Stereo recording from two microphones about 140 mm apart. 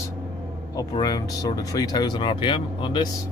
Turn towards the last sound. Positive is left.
turn(degrees=35)  # may be behind; listen again after turning